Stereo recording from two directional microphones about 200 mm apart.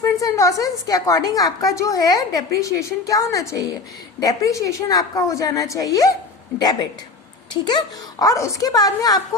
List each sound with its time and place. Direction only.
0.0 s a woman's voice: 15° left (ahead or behind)
7.5 s a woman's voice: 20° left (ahead or behind)